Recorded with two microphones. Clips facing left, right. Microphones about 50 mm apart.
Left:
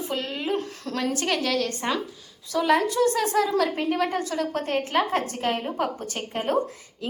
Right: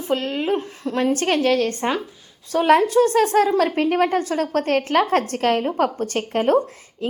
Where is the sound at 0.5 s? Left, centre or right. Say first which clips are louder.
Right 5 dB; right.